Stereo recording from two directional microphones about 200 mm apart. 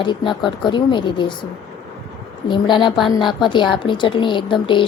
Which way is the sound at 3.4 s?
25° left (ahead or behind).